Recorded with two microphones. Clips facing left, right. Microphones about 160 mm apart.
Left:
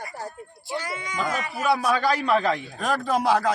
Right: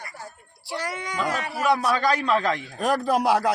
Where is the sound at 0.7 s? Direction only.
70° right (ahead or behind).